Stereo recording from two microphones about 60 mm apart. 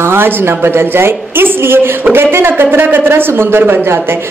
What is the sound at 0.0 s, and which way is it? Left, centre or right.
A woman's voice, right.